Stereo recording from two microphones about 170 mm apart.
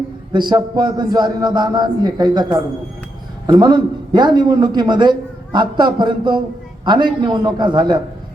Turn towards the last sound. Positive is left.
turn(degrees=-25)  # may be behind; listen again after turning